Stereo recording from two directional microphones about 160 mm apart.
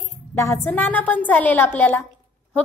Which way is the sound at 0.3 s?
15° left (ahead or behind).